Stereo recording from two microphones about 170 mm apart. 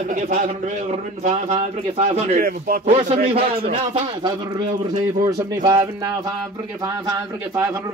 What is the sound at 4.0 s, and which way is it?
A man's voice, 30° right (ahead or behind).